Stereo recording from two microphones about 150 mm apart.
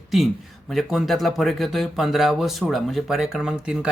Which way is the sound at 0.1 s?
Centre (ahead or behind).